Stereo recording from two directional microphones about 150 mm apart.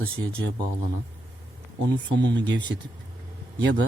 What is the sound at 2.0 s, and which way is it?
Speech, 30° right (ahead or behind).